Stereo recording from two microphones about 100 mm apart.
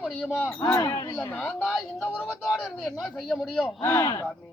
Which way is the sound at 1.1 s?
20° left (ahead or behind).